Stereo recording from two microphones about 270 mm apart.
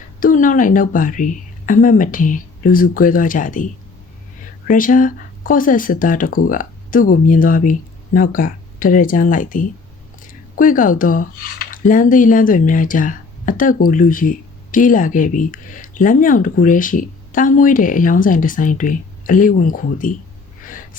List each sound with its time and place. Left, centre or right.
0.2 s speech: left